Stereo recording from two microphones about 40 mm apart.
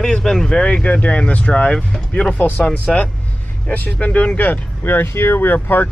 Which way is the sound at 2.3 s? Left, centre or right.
Left.